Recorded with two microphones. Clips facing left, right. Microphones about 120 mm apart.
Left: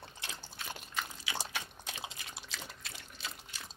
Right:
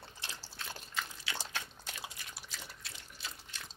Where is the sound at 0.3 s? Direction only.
15° left (ahead or behind).